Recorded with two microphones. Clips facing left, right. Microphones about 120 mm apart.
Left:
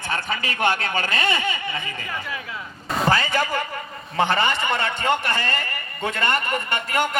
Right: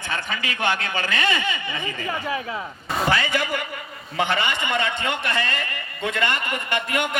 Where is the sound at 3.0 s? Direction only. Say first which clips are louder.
Left 2 dB; 40° left (ahead or behind).